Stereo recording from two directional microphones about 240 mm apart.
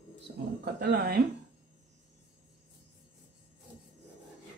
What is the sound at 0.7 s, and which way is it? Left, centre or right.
Speech, right.